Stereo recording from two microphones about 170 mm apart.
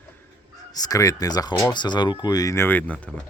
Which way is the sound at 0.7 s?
20° left (ahead or behind).